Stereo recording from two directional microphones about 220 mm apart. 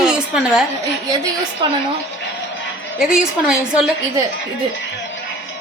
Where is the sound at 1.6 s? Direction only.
20° right (ahead or behind).